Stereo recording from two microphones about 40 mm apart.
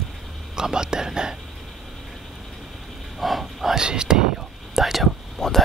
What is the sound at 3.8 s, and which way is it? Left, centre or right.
Whispering, centre.